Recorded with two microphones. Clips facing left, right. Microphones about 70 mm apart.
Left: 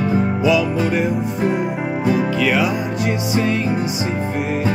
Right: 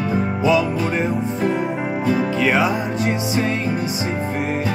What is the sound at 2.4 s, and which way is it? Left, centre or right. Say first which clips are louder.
Music: even; right.